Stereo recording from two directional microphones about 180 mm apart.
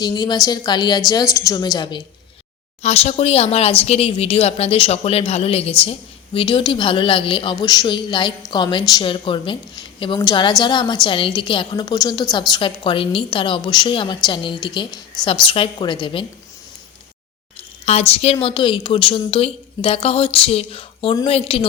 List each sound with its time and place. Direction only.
0.0 s a woman's voice: 25° left (ahead or behind)
2.8 s a woman's voice: 35° left (ahead or behind)
17.8 s a woman's voice: 35° left (ahead or behind)